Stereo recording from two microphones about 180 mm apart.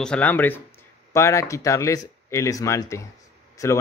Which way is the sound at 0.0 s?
5° left (ahead or behind).